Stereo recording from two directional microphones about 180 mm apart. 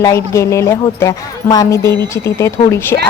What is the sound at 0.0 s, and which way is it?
Speech, 15° left (ahead or behind).